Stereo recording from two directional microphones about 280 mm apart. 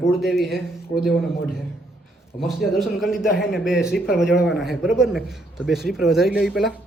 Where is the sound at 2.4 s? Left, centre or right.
Centre.